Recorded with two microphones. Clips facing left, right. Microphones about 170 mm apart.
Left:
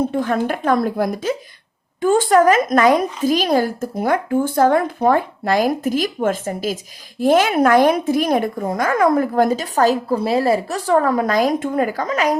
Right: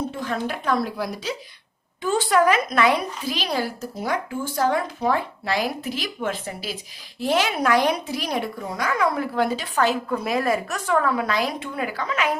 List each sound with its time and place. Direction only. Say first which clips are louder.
0.1 s a woman's voice: left 8 dB; 50° left (ahead or behind)